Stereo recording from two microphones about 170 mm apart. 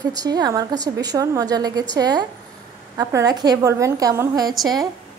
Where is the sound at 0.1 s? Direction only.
25° right (ahead or behind).